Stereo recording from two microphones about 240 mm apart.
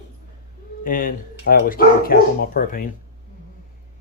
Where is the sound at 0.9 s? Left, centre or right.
Left.